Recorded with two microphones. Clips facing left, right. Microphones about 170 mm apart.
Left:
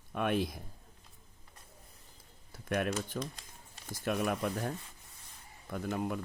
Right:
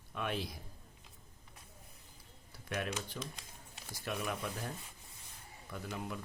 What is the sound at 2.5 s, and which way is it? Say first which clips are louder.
Speech: left 6 dB; 50° left (ahead or behind).